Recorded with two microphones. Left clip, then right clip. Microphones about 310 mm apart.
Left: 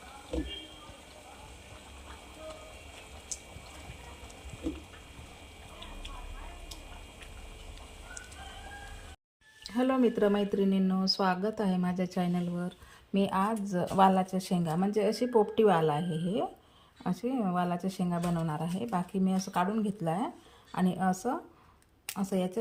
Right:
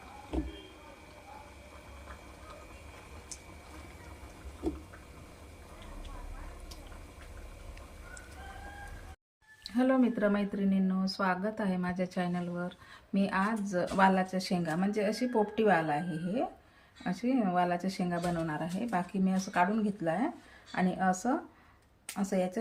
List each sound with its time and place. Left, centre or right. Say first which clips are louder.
9.6 s speech: left 1 dB; centre